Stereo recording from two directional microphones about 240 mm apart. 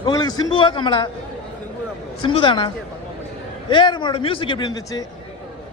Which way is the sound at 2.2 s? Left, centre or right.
Left.